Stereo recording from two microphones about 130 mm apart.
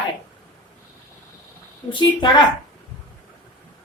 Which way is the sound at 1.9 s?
35° left (ahead or behind).